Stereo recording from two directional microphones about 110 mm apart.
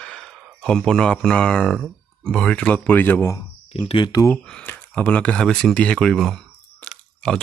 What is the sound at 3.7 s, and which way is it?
Speech, 50° left (ahead or behind).